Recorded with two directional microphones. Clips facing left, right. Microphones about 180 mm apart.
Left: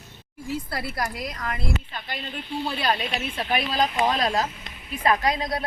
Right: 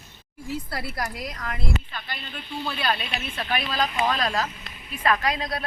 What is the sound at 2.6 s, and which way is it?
Speech, 15° left (ahead or behind).